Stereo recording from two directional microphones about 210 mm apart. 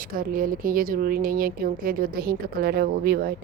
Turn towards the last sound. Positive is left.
turn(degrees=-45)  # may be behind; listen again after turning